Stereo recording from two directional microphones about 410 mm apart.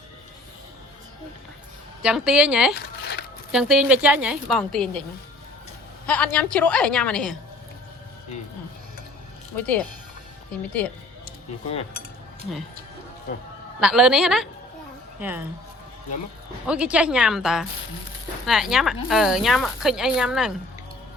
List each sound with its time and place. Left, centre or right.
2.0 s speech: centre
3.0 s a sound: left
3.5 s speech: centre
6.1 s speech: centre
9.6 s speech: centre
11.3 s speech: centre
13.7 s speech: centre
16.6 s speech: centre